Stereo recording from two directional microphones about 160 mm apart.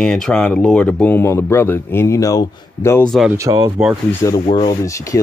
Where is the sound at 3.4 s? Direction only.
20° right (ahead or behind).